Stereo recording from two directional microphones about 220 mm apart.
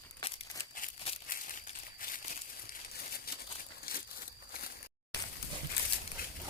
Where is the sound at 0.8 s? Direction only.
35° left (ahead or behind).